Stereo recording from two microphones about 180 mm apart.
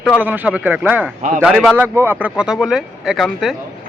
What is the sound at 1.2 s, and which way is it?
Speech, 45° right (ahead or behind).